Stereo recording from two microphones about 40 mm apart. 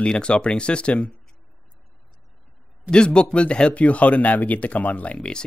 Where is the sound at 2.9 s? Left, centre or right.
Left.